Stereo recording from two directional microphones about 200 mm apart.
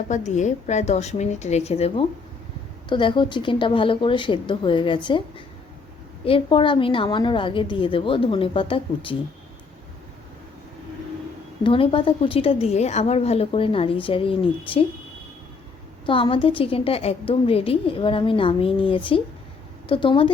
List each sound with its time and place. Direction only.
0.1 s a woman's voice: 35° left (ahead or behind)
6.2 s a woman's voice: 25° left (ahead or behind)
11.6 s a woman's voice: 25° left (ahead or behind)
16.0 s a woman's voice: 25° left (ahead or behind)